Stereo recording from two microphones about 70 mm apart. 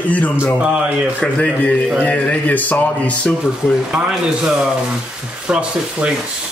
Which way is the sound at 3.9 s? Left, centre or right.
Centre.